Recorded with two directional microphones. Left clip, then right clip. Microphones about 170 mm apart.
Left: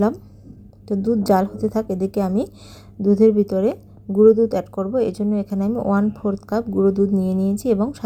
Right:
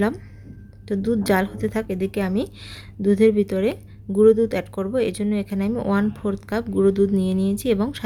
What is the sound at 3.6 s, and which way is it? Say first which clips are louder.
Speech: left 2 dB; 15° right (ahead or behind).